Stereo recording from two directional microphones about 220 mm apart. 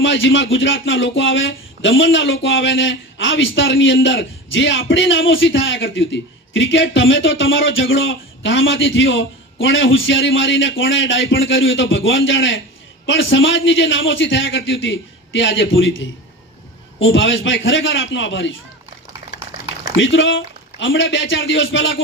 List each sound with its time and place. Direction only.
0.0 s speech: 60° left (ahead or behind)
20.0 s speech: 60° left (ahead or behind)